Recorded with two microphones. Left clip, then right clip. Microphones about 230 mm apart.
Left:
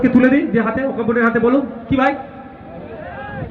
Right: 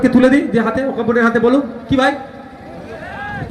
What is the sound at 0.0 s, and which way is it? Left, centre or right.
A man's voice, right.